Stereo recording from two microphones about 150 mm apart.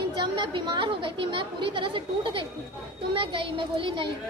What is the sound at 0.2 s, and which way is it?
A woman's voice, 30° right (ahead or behind).